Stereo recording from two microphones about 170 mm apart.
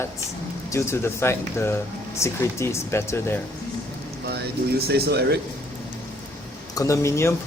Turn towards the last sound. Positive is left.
turn(degrees=15)  # may be behind; listen again after turning